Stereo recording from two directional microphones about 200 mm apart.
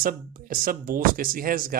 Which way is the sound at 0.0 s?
45° right (ahead or behind).